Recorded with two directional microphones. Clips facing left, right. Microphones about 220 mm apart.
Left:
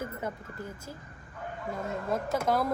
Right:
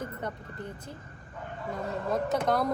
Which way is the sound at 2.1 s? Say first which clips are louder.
Right 1 dB; 5° left (ahead or behind).